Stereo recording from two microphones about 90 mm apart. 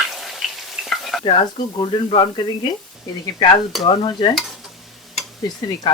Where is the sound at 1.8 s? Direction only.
65° left (ahead or behind).